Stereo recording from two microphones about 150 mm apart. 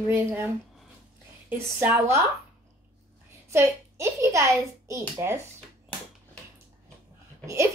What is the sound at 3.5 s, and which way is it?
A child's voice, 20° right (ahead or behind).